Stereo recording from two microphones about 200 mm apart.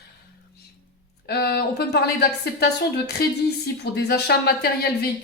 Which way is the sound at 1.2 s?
55° left (ahead or behind).